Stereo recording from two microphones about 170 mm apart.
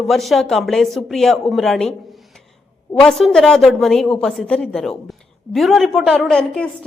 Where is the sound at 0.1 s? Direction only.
Centre (ahead or behind).